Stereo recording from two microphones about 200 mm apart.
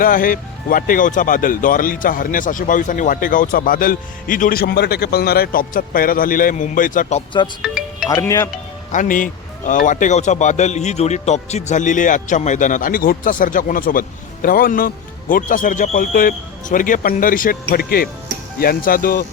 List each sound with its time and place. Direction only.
0.0 s speech: 45° left (ahead or behind)
7.6 s music: 5° right (ahead or behind)
8.1 s speech: 15° left (ahead or behind)
8.9 s a man's voice: 40° left (ahead or behind)